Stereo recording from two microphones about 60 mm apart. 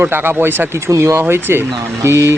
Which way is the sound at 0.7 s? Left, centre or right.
Right.